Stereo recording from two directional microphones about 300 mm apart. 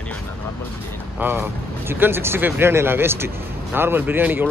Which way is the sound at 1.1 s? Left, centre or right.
Centre.